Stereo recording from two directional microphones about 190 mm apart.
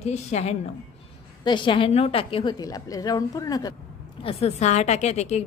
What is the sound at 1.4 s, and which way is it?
A woman's voice, 25° left (ahead or behind).